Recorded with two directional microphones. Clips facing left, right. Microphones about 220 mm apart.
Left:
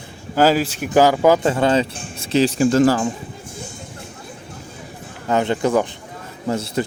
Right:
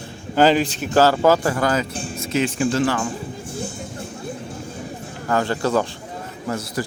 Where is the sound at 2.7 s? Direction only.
40° left (ahead or behind).